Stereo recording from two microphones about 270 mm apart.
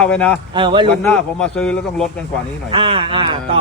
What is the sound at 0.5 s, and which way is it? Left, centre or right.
Speech, centre.